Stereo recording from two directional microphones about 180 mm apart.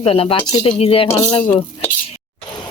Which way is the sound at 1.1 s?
15° left (ahead or behind).